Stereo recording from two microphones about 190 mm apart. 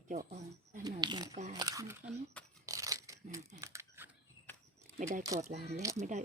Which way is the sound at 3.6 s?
15° right (ahead or behind).